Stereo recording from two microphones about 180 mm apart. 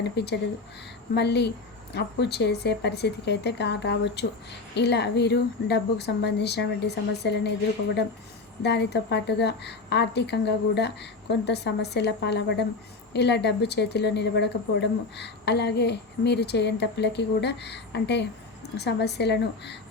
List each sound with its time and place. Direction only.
0.2 s speech: 70° left (ahead or behind)
8.6 s speech: 70° left (ahead or behind)